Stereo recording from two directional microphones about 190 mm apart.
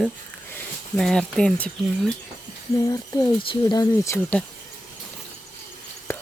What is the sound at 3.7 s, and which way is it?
Speech, 15° left (ahead or behind).